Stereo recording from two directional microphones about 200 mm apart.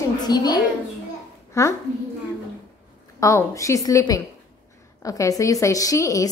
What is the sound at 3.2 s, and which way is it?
A woman's voice, 15° left (ahead or behind).